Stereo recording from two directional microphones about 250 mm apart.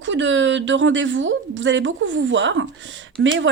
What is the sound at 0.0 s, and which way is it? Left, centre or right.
A woman's voice, right.